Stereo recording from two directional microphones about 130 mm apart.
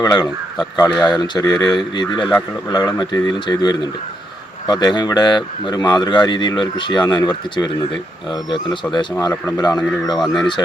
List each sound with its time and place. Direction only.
0.0 s speech: 30° left (ahead or behind)
10.2 s speech: 5° left (ahead or behind)